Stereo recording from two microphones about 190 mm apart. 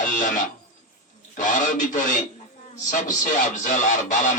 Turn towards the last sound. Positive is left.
turn(degrees=45)  # may be behind; listen again after turning